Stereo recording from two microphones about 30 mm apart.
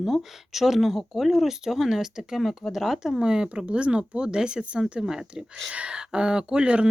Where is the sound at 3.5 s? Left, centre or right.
Right.